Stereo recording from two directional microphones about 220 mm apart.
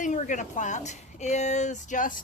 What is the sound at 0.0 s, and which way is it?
A woman's voice, 35° left (ahead or behind).